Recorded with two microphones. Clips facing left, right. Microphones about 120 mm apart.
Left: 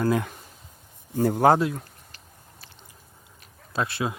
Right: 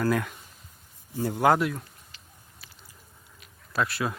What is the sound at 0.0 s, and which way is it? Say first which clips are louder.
Speech: left 2 dB; 25° left (ahead or behind).